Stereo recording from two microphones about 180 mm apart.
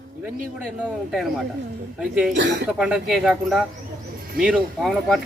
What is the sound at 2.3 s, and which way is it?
Speech, 80° right.